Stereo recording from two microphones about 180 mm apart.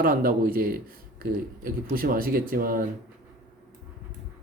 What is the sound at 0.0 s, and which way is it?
Speech, 55° right (ahead or behind).